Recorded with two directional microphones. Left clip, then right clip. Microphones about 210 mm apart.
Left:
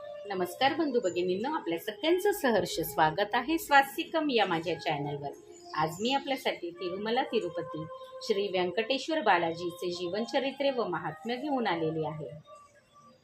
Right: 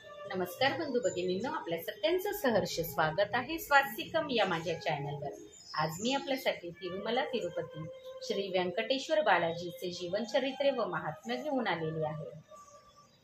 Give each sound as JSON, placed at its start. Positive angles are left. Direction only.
{"t": 0.4, "sound": "a woman's voice", "side_deg": 40}